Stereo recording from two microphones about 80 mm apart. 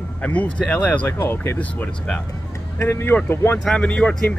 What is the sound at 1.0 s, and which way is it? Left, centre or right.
Speech, left.